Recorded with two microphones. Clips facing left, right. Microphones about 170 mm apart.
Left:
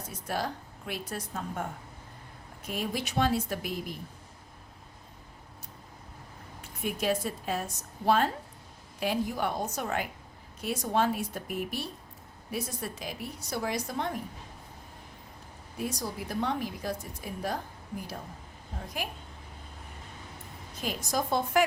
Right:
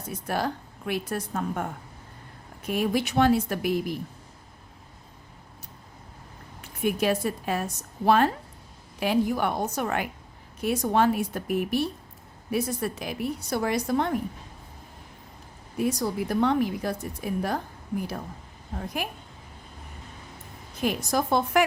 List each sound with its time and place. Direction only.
0.1 s a woman's voice: 60° right (ahead or behind)
2.6 s a woman's voice: 65° right (ahead or behind)
6.8 s a woman's voice: 65° right (ahead or behind)
15.8 s a woman's voice: 65° right (ahead or behind)
19.0 s a woman's voice: 55° right (ahead or behind)
20.8 s speech: 65° right (ahead or behind)